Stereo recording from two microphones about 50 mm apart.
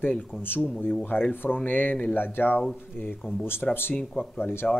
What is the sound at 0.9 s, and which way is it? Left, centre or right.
Speech, left.